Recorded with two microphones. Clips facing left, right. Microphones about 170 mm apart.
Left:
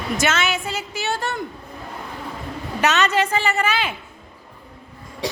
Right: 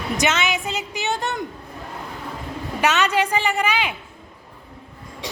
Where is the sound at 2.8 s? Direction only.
10° right (ahead or behind).